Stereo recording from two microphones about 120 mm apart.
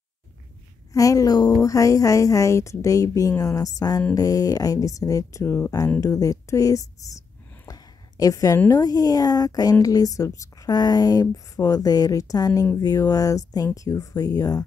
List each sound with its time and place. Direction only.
0.9 s a woman's voice: 30° left (ahead or behind)